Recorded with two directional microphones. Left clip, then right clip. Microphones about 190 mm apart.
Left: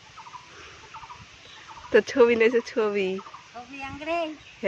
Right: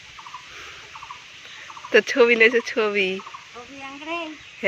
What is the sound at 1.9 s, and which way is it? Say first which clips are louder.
Speech: right 3 dB; 5° left (ahead or behind).